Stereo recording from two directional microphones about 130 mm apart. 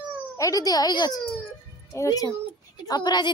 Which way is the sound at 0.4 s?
25° left (ahead or behind).